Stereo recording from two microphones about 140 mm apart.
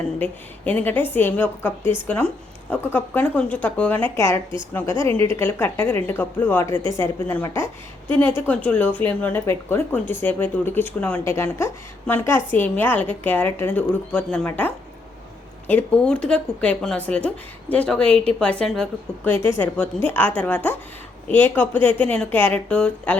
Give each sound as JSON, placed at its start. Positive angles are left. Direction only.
{"t": 0.2, "sound": "a woman's voice", "side_deg": 10}
{"t": 19.5, "sound": "a woman's voice", "side_deg": 15}